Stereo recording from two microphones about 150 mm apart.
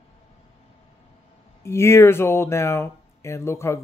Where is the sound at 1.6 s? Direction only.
15° left (ahead or behind).